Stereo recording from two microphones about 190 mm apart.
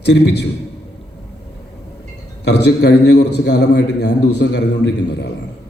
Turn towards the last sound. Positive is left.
turn(degrees=60)  # may be behind; listen again after turning